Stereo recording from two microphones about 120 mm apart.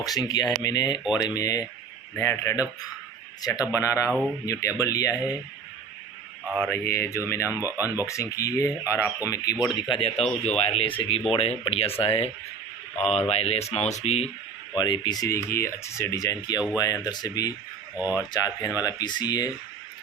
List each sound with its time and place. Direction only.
0.0 s speech: 30° left (ahead or behind)
6.4 s speech: 5° right (ahead or behind)
6.7 s speech: 20° left (ahead or behind)
9.6 s speech: 5° right (ahead or behind)
9.9 s speech: 55° left (ahead or behind)
14.8 s speech: 35° left (ahead or behind)
17.9 s speech: 15° right (ahead or behind)
18.3 s speech: 30° left (ahead or behind)